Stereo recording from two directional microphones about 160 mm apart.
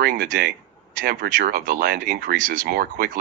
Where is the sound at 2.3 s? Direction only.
60° right (ahead or behind); by 3.1 s 75° right (ahead or behind).